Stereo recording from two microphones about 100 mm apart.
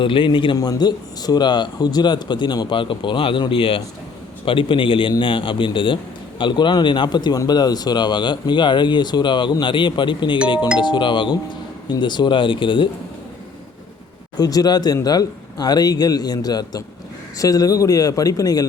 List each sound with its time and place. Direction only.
0.0 s speech: 55° left (ahead or behind)
0.5 s speech: 40° left (ahead or behind); by 12.9 s 55° left (ahead or behind)
14.3 s a man's voice: 40° left (ahead or behind)